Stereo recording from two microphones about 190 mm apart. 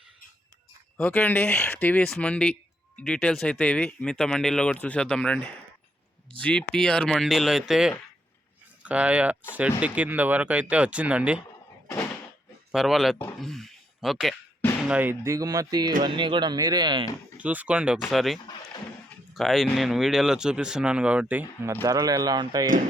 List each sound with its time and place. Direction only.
0.9 s speech: 5° left (ahead or behind)
12.7 s speech: centre (ahead or behind); by 17.1 s 25° right (ahead or behind)
17.3 s speech: 10° right (ahead or behind)